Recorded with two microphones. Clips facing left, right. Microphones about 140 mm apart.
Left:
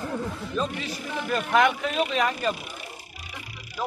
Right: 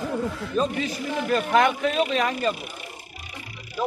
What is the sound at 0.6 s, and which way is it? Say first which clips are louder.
Speech: right 5 dB; 45° right (ahead or behind).